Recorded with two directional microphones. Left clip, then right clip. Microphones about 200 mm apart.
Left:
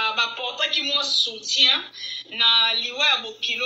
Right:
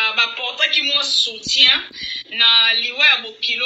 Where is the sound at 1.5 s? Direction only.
20° right (ahead or behind).